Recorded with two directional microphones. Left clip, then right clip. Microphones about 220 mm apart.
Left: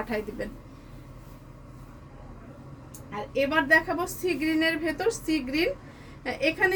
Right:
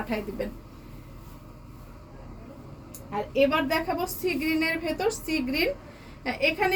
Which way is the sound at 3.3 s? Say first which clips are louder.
Left 2 dB; 10° left (ahead or behind).